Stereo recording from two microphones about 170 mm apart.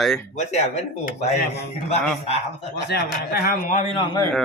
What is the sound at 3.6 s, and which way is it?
Speech, 45° left (ahead or behind).